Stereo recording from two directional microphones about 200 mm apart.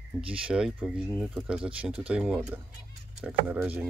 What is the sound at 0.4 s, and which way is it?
Speech, 5° right (ahead or behind).